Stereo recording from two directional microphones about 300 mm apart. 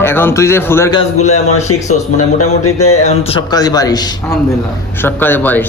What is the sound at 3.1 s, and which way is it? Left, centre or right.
A man's voice, centre.